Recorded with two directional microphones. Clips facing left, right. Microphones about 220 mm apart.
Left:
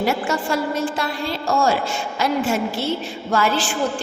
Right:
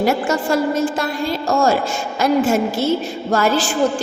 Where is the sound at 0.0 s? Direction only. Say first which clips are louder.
Right 4 dB; 45° right (ahead or behind).